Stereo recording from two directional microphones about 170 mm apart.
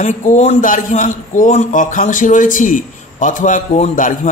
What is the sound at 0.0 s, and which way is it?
A man's voice, 45° left (ahead or behind).